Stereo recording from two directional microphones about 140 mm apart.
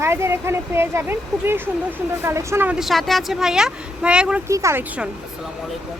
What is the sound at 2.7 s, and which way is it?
Speech, centre (ahead or behind).